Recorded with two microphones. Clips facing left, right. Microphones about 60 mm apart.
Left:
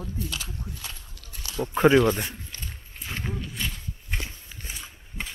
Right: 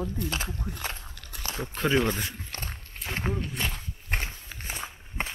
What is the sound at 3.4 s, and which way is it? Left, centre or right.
Walk, right.